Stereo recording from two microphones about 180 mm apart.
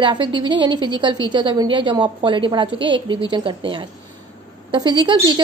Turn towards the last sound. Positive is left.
turn(degrees=-25)  # may be behind; listen again after turning